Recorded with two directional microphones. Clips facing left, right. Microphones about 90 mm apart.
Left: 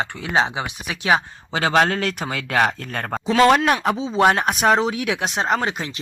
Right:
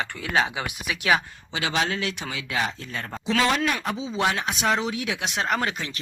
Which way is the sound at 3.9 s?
35° left (ahead or behind).